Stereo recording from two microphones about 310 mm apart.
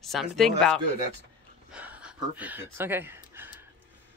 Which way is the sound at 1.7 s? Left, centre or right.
Centre.